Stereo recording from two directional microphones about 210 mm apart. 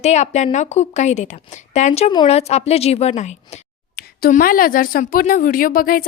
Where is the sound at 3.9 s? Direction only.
45° left (ahead or behind).